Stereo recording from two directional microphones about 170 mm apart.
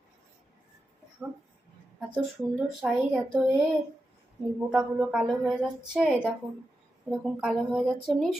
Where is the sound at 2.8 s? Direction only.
Centre (ahead or behind).